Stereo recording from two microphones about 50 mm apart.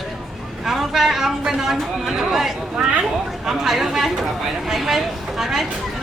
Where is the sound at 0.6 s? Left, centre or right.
Centre.